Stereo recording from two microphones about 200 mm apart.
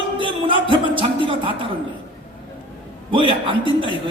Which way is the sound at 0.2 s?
25° right (ahead or behind).